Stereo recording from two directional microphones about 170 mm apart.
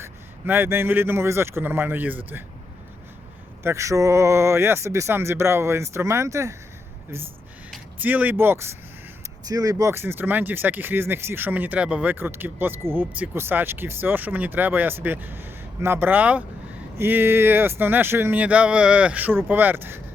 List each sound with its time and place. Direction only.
0.0 s speech: 10° right (ahead or behind)
3.6 s speech: 15° right (ahead or behind)
7.9 s speech: 10° right (ahead or behind)